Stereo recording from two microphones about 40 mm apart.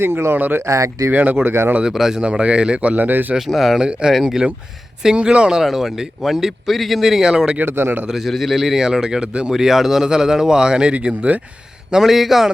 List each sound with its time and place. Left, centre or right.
0.0 s speech: right
0.3 s speech: right
1.9 s speech: centre
2.1 s a man's voice: right
3.0 s speech: right
3.3 s speech: centre
3.8 s a man's voice: right
5.6 s speech: centre
7.6 s a man's voice: right
8.0 s speech: centre
8.5 s speech: centre; by 11.3 s right
12.0 s speech: centre